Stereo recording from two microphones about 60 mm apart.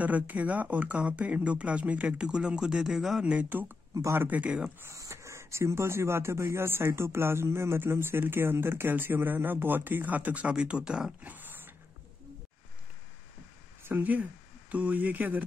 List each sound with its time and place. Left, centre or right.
0.0 s speech: right; by 3.3 s centre
3.4 s speech: right
4.5 s speech: centre
4.8 s speech: right
10.5 s speech: centre
11.2 s dog: right
13.8 s speech: right